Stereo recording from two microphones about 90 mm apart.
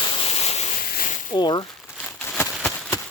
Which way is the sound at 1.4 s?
55° left (ahead or behind).